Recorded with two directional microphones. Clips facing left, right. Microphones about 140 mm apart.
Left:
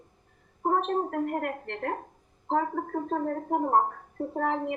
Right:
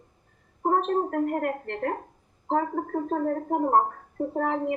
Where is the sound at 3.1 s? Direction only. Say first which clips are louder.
Right 2 dB; 35° right (ahead or behind).